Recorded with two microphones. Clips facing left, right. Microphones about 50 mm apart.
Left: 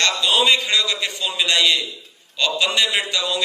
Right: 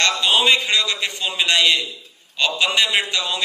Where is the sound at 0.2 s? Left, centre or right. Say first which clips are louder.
Right 1 dB; right.